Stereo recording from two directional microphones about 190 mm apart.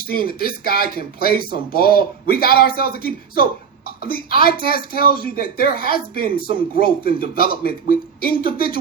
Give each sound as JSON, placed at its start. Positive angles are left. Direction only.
{"t": 0.1, "sound": "speech", "side_deg": 50}